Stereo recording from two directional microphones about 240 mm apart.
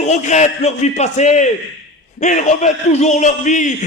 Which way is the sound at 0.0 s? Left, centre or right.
Left.